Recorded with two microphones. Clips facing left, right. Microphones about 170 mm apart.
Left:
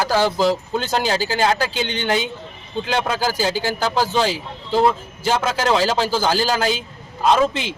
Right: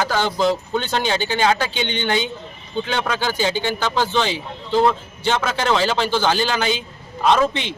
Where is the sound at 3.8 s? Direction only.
35° left (ahead or behind).